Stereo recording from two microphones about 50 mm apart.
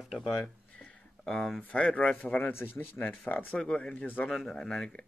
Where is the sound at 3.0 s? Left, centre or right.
Left.